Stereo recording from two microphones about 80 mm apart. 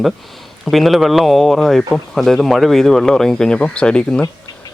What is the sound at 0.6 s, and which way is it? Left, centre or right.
Speech, centre.